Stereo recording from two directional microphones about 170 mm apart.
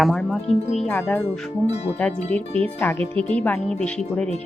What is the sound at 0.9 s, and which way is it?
Speech, 10° left (ahead or behind).